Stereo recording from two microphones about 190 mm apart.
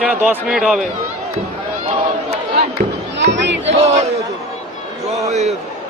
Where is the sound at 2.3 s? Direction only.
55° right (ahead or behind).